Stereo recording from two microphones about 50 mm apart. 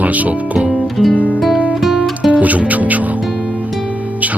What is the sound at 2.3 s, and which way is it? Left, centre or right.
Music, right.